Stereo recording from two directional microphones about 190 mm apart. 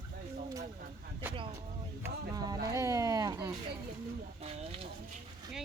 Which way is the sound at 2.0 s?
20° right (ahead or behind).